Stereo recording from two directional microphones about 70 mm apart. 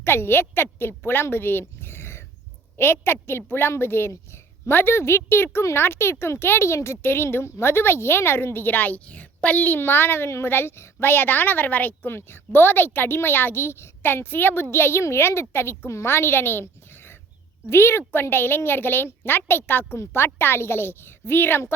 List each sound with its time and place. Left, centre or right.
0.0 s a woman's voice: left